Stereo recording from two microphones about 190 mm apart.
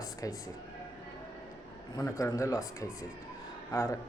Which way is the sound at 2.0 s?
15° left (ahead or behind).